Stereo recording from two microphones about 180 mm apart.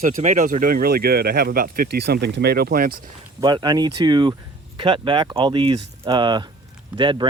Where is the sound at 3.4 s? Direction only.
25° right (ahead or behind).